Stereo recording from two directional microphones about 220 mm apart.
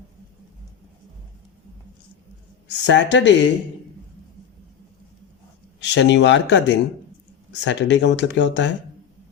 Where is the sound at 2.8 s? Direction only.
55° left (ahead or behind).